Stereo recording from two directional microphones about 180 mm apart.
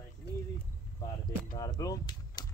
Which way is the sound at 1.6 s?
20° left (ahead or behind).